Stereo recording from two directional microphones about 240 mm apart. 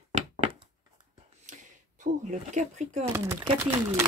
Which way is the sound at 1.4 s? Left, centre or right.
Right.